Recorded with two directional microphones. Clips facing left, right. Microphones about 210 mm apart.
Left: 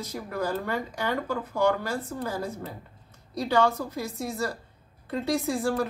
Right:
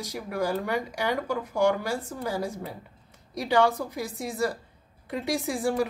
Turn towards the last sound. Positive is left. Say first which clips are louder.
# even
turn(degrees=-15)  # may be behind; listen again after turning